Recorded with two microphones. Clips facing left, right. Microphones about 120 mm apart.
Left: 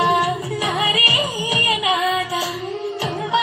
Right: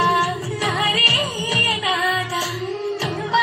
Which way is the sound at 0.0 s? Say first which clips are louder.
Left 1 dB; 15° left (ahead or behind).